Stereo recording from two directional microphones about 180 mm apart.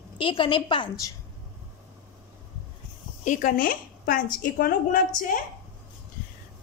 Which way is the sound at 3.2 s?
50° left (ahead or behind).